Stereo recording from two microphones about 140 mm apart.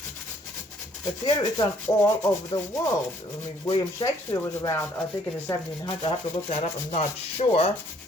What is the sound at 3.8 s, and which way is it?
Speech, 25° left (ahead or behind).